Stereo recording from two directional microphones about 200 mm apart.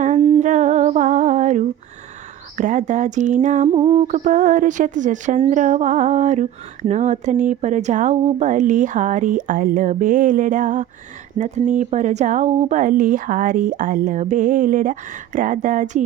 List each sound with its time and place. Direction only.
0.0 s humming: 30° right (ahead or behind)
2.6 s mantra: 40° right (ahead or behind)
3.7 s mantra: 25° right (ahead or behind)